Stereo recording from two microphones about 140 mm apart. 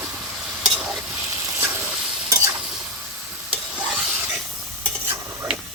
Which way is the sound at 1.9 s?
5° right (ahead or behind).